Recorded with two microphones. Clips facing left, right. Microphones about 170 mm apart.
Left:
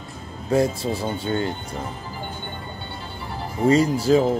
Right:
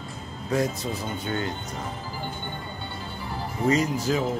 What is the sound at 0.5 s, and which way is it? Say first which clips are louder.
Speech: left 5 dB; 30° left (ahead or behind).